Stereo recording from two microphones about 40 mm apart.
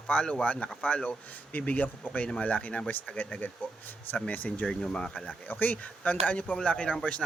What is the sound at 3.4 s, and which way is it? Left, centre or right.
A man's voice, left.